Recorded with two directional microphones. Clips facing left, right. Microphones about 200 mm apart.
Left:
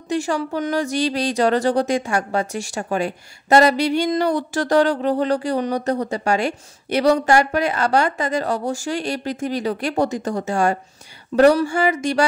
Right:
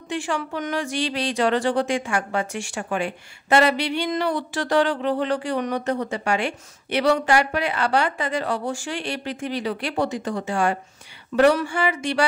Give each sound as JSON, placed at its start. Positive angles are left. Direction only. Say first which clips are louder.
{"t": 0.1, "sound": "speech", "louder": "left 5 dB", "side_deg": 40}